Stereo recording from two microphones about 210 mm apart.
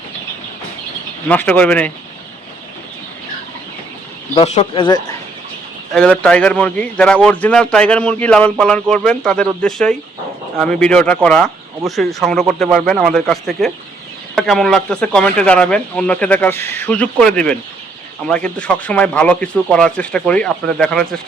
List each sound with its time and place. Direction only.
1.3 s speech: 5° left (ahead or behind)
4.4 s speech: 25° left (ahead or behind)
5.9 s a man's voice: 5° left (ahead or behind)